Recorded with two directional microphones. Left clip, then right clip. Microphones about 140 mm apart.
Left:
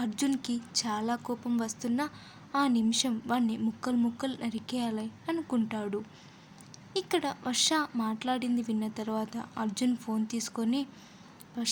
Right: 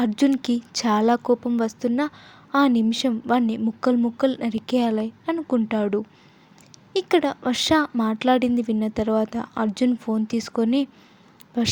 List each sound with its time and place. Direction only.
0.0 s a woman's voice: 50° right (ahead or behind)